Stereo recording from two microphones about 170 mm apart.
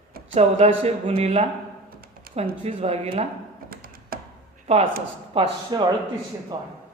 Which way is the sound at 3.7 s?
60° right (ahead or behind).